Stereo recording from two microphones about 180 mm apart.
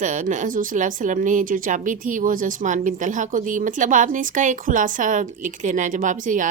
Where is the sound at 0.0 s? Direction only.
45° right (ahead or behind).